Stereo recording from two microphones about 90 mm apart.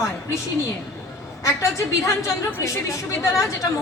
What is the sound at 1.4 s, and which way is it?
Speech, 35° left (ahead or behind).